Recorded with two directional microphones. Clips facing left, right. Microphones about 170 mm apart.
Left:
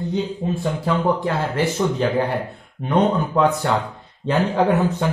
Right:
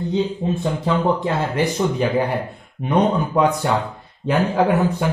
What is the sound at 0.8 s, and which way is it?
Speech, 20° right (ahead or behind).